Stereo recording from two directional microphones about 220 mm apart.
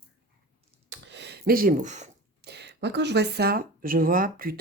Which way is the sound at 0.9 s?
55° right (ahead or behind).